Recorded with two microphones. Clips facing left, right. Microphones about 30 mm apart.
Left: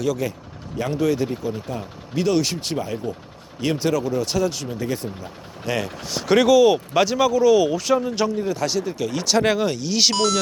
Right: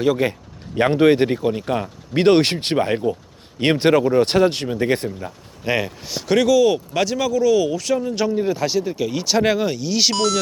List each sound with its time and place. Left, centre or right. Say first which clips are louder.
0.0 s speech: right 5 dB; right
5.6 s speech: right 4 dB; right
6.2 s speech: left 1 dB; centre
8.4 s speech: right 3 dB; centre